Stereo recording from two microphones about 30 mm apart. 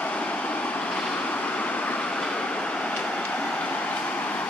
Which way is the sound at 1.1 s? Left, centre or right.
Left.